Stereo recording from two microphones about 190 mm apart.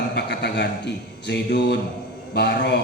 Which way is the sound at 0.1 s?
60° left (ahead or behind).